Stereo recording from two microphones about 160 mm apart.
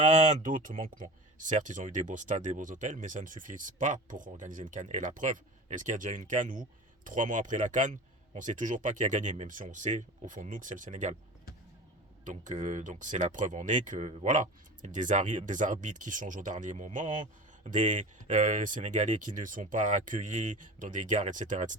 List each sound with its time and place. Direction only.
0.0 s speech: 50° right (ahead or behind)
12.2 s speech: 50° right (ahead or behind)